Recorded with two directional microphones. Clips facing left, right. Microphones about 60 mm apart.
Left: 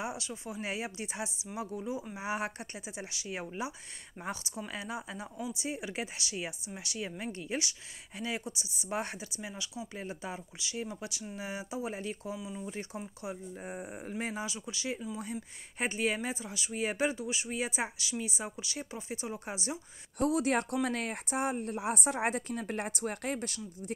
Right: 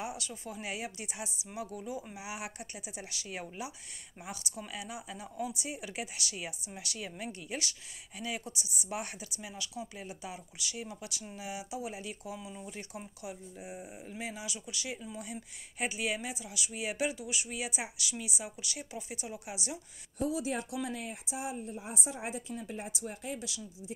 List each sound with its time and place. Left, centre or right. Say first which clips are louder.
0.0 s speech: left 2 dB; left
12.4 s speech: left 4 dB; centre
12.7 s speech: left 4 dB; left
13.7 s speech: left 4 dB; left
14.1 s speech: left 4 dB; left
20.2 s speech: left 5 dB; left